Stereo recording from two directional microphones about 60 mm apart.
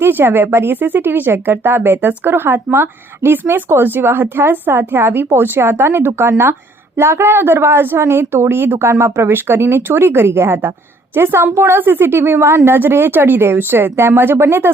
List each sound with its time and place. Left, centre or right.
0.0 s speech: right